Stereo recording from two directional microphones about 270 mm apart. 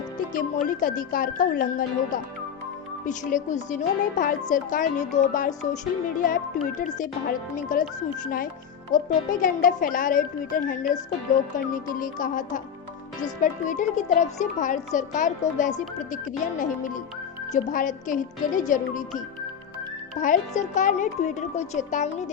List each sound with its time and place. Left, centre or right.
0.8 s a woman's voice: left
3.1 s a woman's voice: left